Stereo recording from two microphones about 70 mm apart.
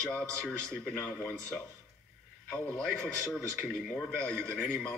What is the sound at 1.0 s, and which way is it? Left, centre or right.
Speech, left.